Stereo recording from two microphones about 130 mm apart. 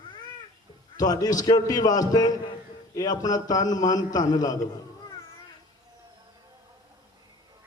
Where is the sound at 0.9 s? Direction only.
30° left (ahead or behind).